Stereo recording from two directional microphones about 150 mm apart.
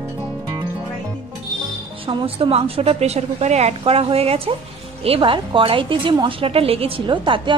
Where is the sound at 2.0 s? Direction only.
40° right (ahead or behind).